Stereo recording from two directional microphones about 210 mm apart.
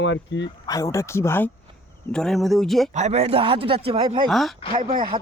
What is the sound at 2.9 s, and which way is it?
Speech, 30° right (ahead or behind).